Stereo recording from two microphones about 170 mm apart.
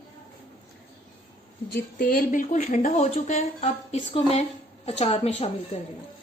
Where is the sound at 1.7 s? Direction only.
60° left (ahead or behind); by 5.5 s 35° left (ahead or behind).